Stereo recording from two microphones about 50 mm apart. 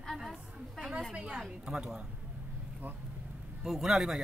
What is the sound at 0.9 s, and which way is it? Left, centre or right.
Speech, centre.